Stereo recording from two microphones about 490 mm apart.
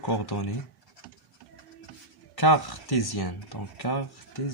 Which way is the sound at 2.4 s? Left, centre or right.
Left.